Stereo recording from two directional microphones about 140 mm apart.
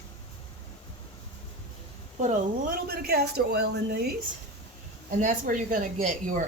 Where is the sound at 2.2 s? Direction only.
75° right (ahead or behind).